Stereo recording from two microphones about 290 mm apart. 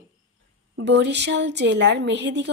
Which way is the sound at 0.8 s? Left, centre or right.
Right.